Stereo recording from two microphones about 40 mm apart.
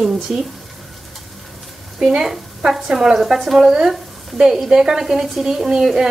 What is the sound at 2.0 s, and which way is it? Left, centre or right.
Speech, centre.